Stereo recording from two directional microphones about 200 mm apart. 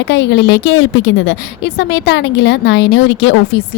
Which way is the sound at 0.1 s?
60° left (ahead or behind).